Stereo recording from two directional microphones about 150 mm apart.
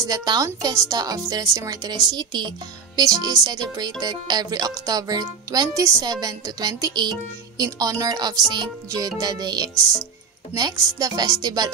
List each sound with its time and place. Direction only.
0.0 s speech: 25° right (ahead or behind)